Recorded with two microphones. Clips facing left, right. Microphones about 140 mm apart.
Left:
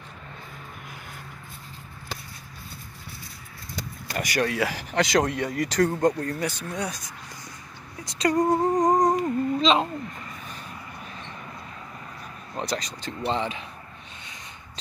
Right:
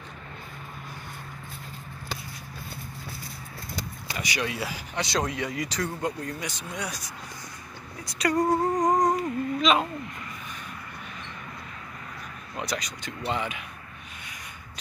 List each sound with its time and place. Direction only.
4.1 s speech: 50° left (ahead or behind)
4.6 s speech: 75° left (ahead or behind); by 6.9 s 40° left (ahead or behind)
8.2 s speech: 20° left (ahead or behind)
12.5 s speech: 30° left (ahead or behind)